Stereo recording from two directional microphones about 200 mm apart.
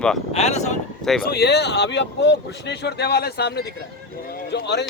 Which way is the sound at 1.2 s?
50° left (ahead or behind).